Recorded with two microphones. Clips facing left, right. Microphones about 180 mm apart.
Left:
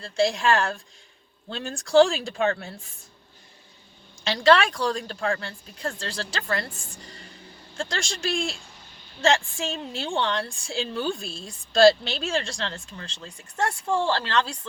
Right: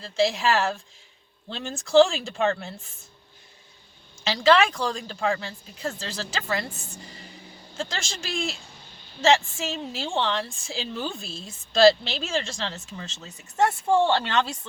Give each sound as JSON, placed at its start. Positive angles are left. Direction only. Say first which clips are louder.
{"t": 0.0, "sound": "a woman's voice", "louder": "even", "side_deg": 0}
{"t": 4.2, "sound": "a woman's voice", "louder": "even", "side_deg": -5}
{"t": 7.8, "sound": "a woman's voice", "louder": "left 2 dB", "side_deg": -5}
{"t": 13.8, "sound": "speech", "louder": "right 5 dB", "side_deg": -25}
{"t": 14.3, "sound": "speech", "louder": "even", "side_deg": -5}